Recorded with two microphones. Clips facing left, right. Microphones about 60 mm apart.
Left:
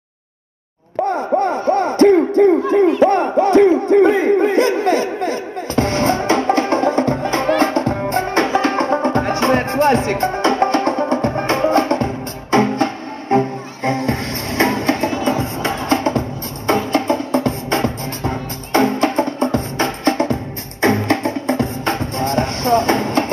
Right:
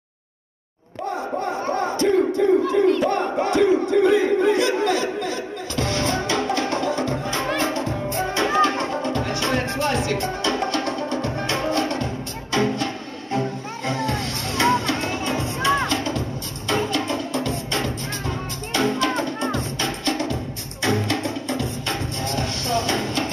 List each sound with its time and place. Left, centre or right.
1.4 s a sound: left
3.0 s crowd: left
7.5 s music: left